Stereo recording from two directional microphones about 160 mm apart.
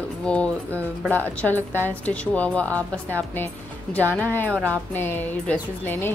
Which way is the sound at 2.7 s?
15° right (ahead or behind).